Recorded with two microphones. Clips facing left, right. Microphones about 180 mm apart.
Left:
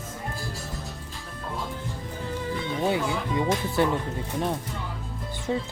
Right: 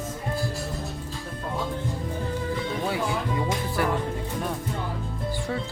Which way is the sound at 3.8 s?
25° left (ahead or behind).